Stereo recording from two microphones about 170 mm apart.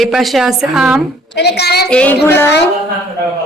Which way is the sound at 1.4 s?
75° left (ahead or behind).